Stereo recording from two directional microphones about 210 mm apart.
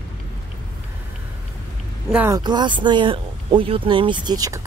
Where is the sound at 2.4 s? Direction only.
20° right (ahead or behind).